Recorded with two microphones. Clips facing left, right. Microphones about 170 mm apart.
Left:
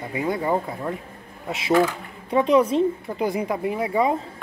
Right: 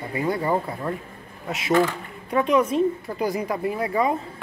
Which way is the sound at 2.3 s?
30° left (ahead or behind).